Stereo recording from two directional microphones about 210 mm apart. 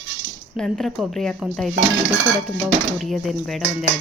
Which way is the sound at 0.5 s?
Centre (ahead or behind).